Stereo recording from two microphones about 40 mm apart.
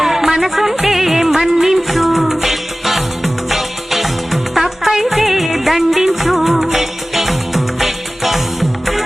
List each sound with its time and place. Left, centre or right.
0.0 s music of bollywood: centre